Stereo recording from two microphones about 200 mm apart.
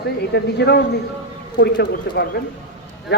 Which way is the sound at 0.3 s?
55° left (ahead or behind).